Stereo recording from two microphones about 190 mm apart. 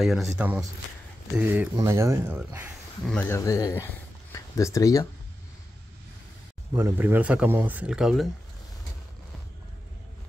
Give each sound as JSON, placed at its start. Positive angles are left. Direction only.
{"t": 0.0, "sound": "speech", "side_deg": 0}
{"t": 3.1, "sound": "speech", "side_deg": 10}
{"t": 6.7, "sound": "speech", "side_deg": -10}